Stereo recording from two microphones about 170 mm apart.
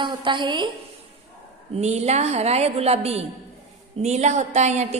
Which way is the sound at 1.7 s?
40° right (ahead or behind).